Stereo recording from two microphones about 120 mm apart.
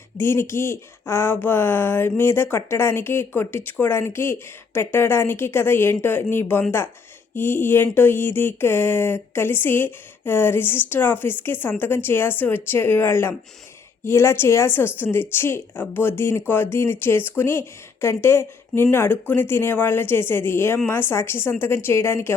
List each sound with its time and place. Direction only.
0.2 s speech: 20° left (ahead or behind)